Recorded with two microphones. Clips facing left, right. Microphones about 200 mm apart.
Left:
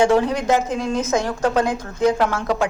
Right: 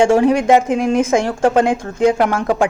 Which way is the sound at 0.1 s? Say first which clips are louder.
Right 6 dB; 60° right (ahead or behind).